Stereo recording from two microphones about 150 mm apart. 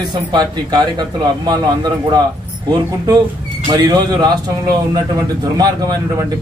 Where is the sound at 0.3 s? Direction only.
30° right (ahead or behind).